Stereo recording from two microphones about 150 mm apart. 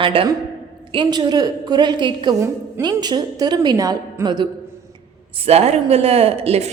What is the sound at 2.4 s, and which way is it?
A woman's voice, 20° right (ahead or behind).